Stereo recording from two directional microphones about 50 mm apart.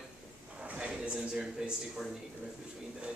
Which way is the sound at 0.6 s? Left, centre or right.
Right.